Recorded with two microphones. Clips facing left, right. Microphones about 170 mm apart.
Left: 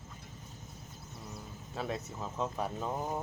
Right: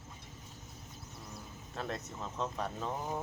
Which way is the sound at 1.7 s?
5° left (ahead or behind).